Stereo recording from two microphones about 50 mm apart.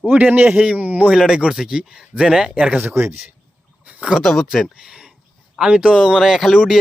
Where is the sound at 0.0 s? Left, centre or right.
Right.